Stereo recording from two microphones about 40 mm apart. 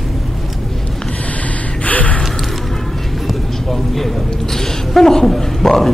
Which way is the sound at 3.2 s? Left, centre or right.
Centre.